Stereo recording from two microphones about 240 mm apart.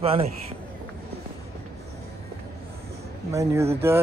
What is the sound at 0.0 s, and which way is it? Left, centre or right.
Speech, right.